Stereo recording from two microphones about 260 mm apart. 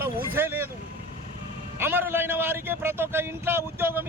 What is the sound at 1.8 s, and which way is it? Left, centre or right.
A man's voice, centre.